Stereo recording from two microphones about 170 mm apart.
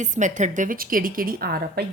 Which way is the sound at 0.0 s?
45° right (ahead or behind).